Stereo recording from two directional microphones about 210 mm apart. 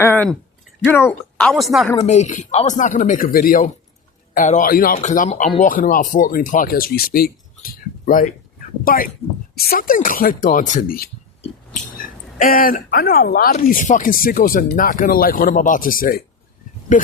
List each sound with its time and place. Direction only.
0.0 s a sound: 10° left (ahead or behind)
0.9 s speech: 10° left (ahead or behind)
2.0 s speech: 35° left (ahead or behind)